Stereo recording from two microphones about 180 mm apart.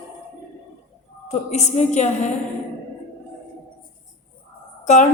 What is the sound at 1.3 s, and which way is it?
A man's voice, 40° left (ahead or behind).